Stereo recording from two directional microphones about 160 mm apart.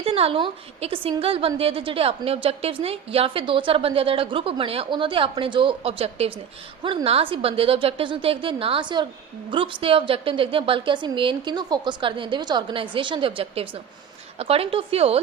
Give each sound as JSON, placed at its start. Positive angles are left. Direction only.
{"t": 0.0, "sound": "a woman's voice", "side_deg": -35}